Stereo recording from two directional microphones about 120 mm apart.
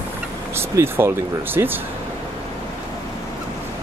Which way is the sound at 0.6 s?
20° right (ahead or behind).